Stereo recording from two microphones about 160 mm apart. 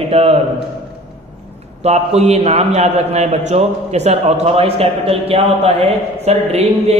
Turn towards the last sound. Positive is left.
turn(degrees=-40)  # may be behind; listen again after turning